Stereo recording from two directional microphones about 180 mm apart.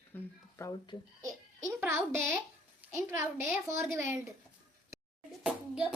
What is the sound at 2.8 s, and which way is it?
A woman's voice, 15° right (ahead or behind).